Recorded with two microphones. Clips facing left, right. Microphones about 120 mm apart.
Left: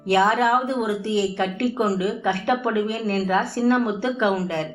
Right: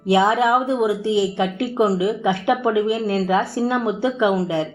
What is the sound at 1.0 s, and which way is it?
Speech, 60° left (ahead or behind).